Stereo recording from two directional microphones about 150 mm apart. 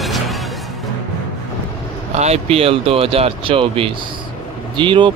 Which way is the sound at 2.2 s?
45° right (ahead or behind).